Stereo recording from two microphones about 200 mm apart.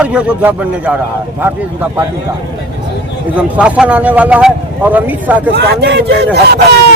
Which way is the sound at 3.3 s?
5° right (ahead or behind).